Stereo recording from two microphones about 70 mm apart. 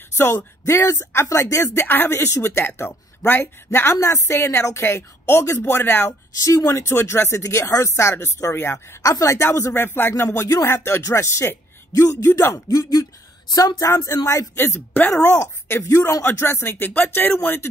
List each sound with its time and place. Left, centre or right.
0.7 s speech: left
6.3 s speech: left
9.4 s speech: left
13.5 s speech: left
14.5 s speech: left
15.9 s speech: left
16.3 s speech: left